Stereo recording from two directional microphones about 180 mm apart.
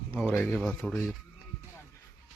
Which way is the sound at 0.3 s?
10° left (ahead or behind).